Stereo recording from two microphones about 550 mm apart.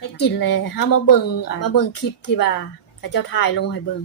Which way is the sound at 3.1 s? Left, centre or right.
Left.